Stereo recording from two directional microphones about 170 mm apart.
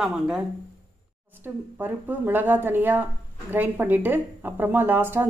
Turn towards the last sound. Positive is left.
turn(degrees=-10)  # may be behind; listen again after turning